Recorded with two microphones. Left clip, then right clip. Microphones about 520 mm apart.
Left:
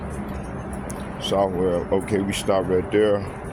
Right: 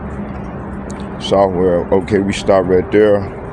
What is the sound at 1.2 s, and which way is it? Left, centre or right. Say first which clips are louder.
Speech: right 9 dB; left.